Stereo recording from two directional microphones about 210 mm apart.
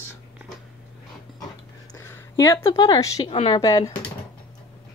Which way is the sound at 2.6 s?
20° left (ahead or behind).